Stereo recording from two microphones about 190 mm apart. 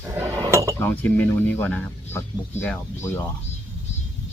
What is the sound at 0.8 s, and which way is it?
Speech, 10° left (ahead or behind).